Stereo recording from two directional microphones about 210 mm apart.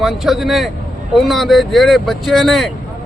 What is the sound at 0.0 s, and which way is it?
Speech, centre (ahead or behind).